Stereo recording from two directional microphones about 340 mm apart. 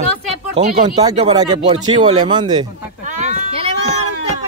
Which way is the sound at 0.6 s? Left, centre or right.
Right.